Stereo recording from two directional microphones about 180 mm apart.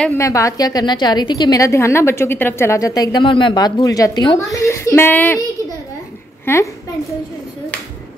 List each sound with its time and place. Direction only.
0.2 s a woman's voice: 15° left (ahead or behind)
6.4 s a woman's voice: 15° left (ahead or behind)